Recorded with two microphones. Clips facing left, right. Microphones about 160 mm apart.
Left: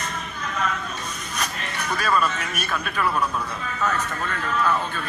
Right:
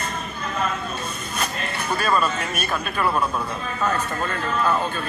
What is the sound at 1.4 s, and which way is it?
A woman's voice, 30° right (ahead or behind).